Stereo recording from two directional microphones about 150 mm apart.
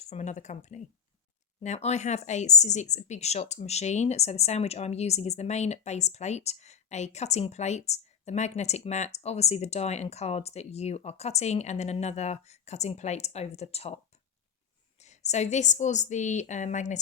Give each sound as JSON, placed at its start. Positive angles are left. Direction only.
{"t": 0.1, "sound": "speech", "side_deg": 50}
{"t": 15.0, "sound": "speech", "side_deg": 50}